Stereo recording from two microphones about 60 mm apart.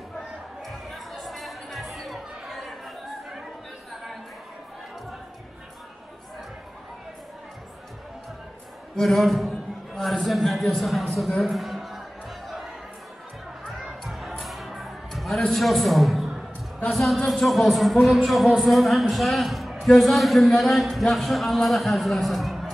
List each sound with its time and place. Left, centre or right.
0.7 s music: centre
8.9 s a man's voice: centre
11.4 s a sound: centre
12.4 s chatter: centre
13.7 s crowd: centre
14.4 s music: centre
16.9 s a man's voice: centre